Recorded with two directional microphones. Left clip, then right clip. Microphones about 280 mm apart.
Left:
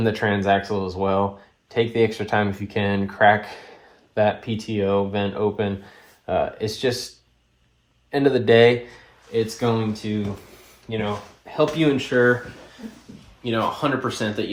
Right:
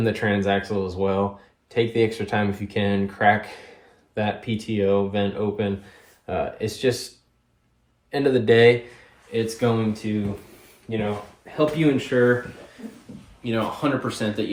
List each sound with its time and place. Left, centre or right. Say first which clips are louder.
0.0 s speech: left 1 dB; left
8.1 s speech: left 2 dB; left
10.9 s speech: even; centre
13.4 s speech: left 2 dB; centre